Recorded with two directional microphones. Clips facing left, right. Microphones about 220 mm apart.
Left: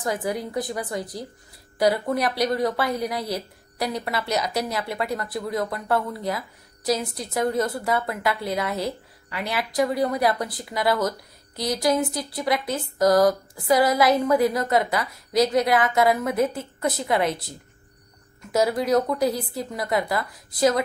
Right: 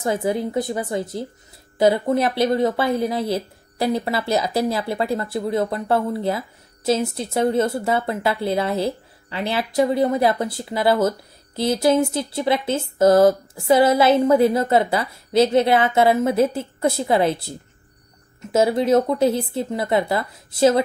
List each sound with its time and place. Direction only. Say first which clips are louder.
0.0 s speech: right 5 dB; 25° right (ahead or behind)